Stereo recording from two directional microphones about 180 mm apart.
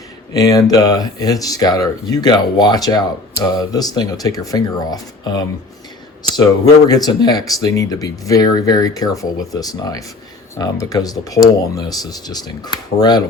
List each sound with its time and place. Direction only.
0.3 s speech: 20° left (ahead or behind)
6.8 s speech: 20° left (ahead or behind)